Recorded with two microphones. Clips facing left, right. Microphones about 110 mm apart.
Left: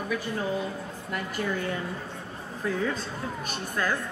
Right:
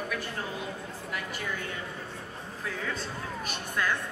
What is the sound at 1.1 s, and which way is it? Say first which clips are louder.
Speech: left 6 dB; 40° left (ahead or behind).